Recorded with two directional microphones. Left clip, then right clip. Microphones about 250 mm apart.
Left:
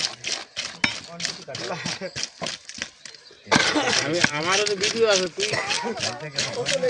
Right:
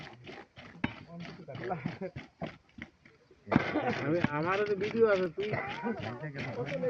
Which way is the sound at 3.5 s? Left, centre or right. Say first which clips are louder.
Left 11 dB; left.